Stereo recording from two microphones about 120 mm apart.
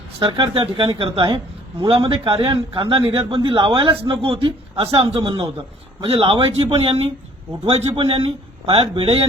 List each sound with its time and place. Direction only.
0.2 s a man's voice: 40° right (ahead or behind); by 9.2 s 55° right (ahead or behind)